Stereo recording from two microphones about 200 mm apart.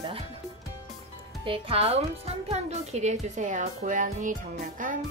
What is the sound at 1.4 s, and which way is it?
A woman's voice, 30° right (ahead or behind).